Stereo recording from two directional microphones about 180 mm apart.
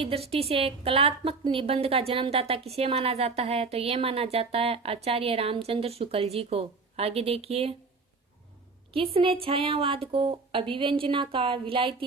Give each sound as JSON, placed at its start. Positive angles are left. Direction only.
{"t": 0.0, "sound": "a woman's voice", "side_deg": -30}
{"t": 8.9, "sound": "a woman's voice", "side_deg": -30}